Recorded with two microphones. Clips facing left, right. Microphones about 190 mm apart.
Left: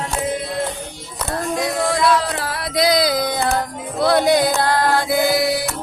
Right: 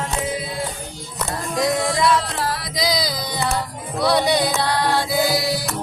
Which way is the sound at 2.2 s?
65° left (ahead or behind).